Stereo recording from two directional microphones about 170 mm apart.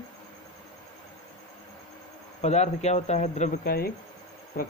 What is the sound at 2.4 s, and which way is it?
Speech, 40° left (ahead or behind).